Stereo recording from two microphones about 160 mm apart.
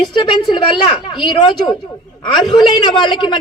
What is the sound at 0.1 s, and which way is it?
A woman's voice, 30° left (ahead or behind).